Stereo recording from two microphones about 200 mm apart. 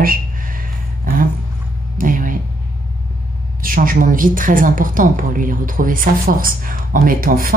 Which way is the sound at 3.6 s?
45° right (ahead or behind).